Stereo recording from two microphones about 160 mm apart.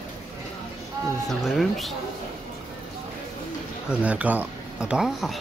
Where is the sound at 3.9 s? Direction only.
10° right (ahead or behind).